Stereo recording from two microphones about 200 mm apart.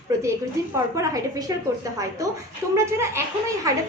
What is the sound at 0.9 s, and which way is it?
Speech, 15° right (ahead or behind).